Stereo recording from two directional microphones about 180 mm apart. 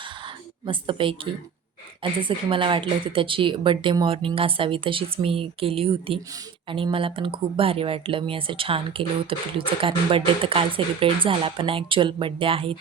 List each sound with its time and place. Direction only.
0.6 s speech: 30° right (ahead or behind)